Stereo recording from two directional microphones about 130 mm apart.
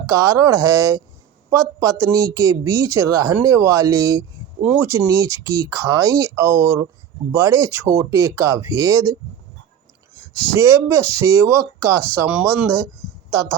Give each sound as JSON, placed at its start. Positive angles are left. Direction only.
{"t": 0.0, "sound": "speech", "side_deg": -25}
{"t": 10.5, "sound": "speech", "side_deg": -20}